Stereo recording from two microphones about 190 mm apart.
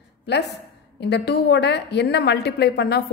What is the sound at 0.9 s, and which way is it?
A woman's voice, 60° left (ahead or behind).